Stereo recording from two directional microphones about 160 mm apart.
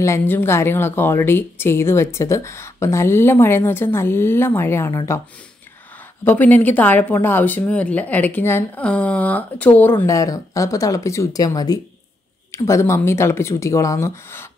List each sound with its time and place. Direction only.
0.0 s speech: 15° left (ahead or behind)
6.2 s speech: 10° left (ahead or behind)